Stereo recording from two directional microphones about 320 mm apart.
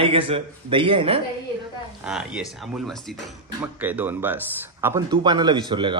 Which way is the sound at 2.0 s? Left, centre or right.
Centre.